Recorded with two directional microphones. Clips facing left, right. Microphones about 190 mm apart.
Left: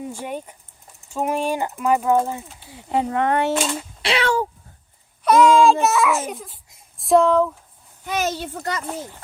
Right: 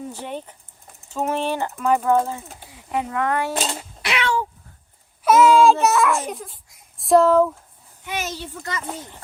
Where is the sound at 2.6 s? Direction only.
30° left (ahead or behind).